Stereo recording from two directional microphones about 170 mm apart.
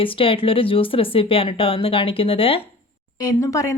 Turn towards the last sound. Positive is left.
turn(degrees=20)  # may be behind; listen again after turning